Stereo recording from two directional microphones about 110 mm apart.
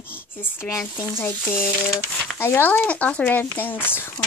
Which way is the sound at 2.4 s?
20° left (ahead or behind).